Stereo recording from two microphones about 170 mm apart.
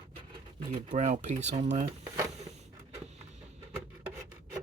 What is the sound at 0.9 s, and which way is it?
Speech, 45° right (ahead or behind).